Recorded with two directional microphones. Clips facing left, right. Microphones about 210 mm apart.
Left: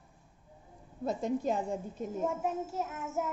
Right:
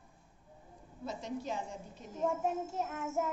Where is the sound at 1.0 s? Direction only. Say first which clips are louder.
Left 8 dB; 50° left (ahead or behind).